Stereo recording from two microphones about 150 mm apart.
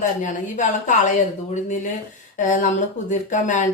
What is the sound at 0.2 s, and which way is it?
A woman's voice, 55° left (ahead or behind).